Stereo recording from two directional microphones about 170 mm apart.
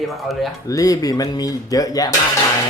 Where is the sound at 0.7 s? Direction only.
20° left (ahead or behind).